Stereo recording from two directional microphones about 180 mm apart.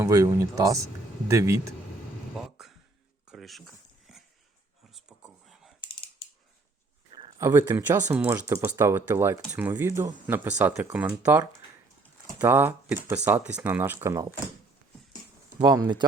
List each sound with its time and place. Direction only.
0.0 s speech: 20° right (ahead or behind)
2.3 s a sound: centre (ahead or behind)
3.2 s dog: centre (ahead or behind)
4.9 s a sound: 5° right (ahead or behind)
5.8 s typing: 30° left (ahead or behind)
7.1 s speech: 25° right (ahead or behind)
15.5 s speech: 25° right (ahead or behind)